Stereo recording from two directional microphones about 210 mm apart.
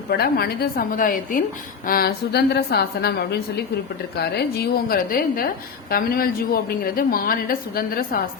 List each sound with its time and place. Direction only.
0.1 s a woman's voice: 50° left (ahead or behind)